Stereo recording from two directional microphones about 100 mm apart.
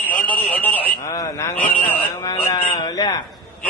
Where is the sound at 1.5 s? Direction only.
15° left (ahead or behind).